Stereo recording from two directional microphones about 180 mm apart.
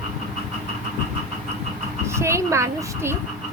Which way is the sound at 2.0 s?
15° right (ahead or behind).